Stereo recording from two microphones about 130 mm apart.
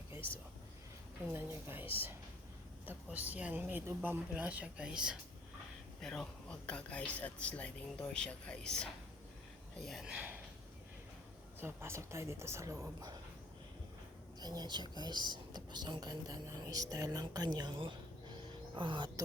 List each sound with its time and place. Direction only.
1.3 s speech: 20° right (ahead or behind)
6.0 s speech: 5° left (ahead or behind); by 10.4 s 10° right (ahead or behind)
11.6 s a woman's voice: 20° right (ahead or behind)
14.4 s speech: 30° right (ahead or behind)